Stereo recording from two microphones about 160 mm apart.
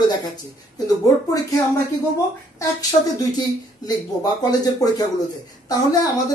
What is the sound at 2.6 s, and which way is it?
Speech, 20° left (ahead or behind).